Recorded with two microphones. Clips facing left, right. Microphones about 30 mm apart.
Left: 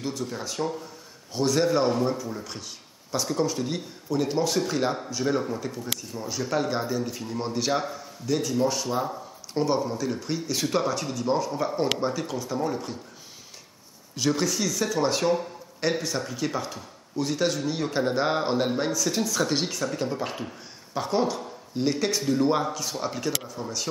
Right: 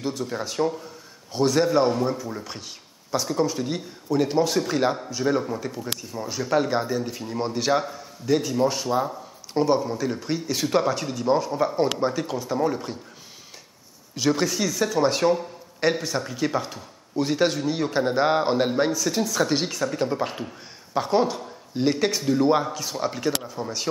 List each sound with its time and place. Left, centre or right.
0.0 s a man's voice: centre
8.3 s speech: centre
14.1 s speech: centre